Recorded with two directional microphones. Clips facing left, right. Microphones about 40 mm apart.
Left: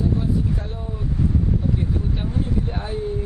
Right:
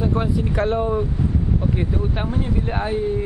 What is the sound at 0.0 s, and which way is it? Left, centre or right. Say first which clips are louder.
Speech: right 1 dB; right.